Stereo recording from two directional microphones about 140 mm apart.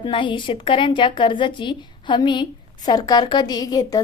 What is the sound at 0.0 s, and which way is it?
A woman's voice, 35° left (ahead or behind).